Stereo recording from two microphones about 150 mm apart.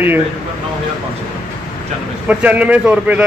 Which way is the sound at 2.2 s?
10° right (ahead or behind).